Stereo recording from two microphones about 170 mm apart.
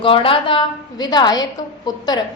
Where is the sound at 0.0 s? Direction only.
30° left (ahead or behind).